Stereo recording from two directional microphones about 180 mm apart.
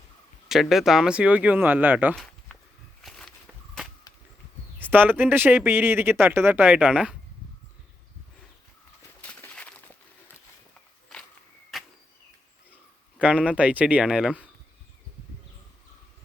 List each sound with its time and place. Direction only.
0.4 s speech: centre (ahead or behind)
2.1 s walk: 5° left (ahead or behind)
3.0 s a sound: centre (ahead or behind)
4.8 s speech: 10° right (ahead or behind)
9.2 s a sound: 5° left (ahead or behind)
11.1 s walk: centre (ahead or behind)
11.7 s arrow: centre (ahead or behind)
13.1 s speech: 5° right (ahead or behind)